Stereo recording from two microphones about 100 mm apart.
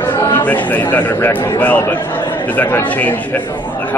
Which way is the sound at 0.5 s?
15° left (ahead or behind).